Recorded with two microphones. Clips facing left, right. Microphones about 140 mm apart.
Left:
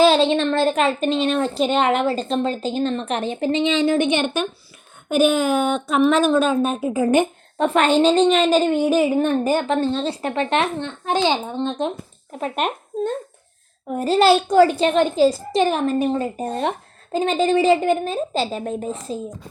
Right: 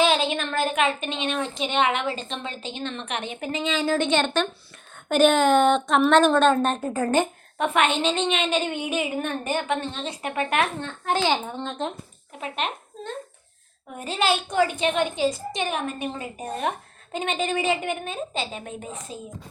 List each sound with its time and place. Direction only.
0.0 s a woman's voice: 35° left (ahead or behind); by 7.3 s 15° left (ahead or behind)
7.6 s a woman's voice: 35° left (ahead or behind)
12.4 s speech: 45° left (ahead or behind)
13.9 s a woman's voice: 40° left (ahead or behind)